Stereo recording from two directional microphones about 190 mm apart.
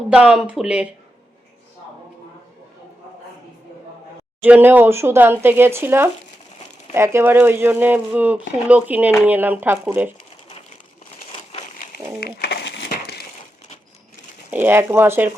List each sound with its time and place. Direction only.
0.1 s speech: 5° right (ahead or behind)
4.4 s speech: 10° right (ahead or behind)
12.2 s crumpling: 55° left (ahead or behind)
14.5 s speech: 10° right (ahead or behind)